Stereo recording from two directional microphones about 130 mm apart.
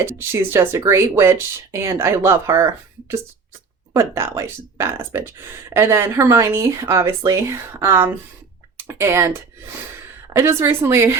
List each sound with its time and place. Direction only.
0.0 s speech: 20° right (ahead or behind)
10.3 s speech: 20° right (ahead or behind)